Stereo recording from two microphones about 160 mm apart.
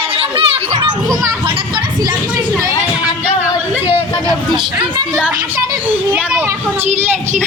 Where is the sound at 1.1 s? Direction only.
20° right (ahead or behind).